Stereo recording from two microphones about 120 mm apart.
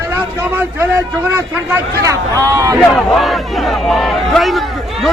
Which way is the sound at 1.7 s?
25° right (ahead or behind).